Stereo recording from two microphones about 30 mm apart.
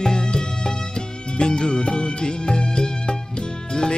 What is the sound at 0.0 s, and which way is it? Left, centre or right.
Music, left.